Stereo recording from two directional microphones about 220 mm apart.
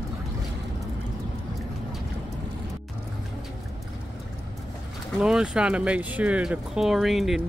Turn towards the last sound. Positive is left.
turn(degrees=0)  # may be behind; listen again after turning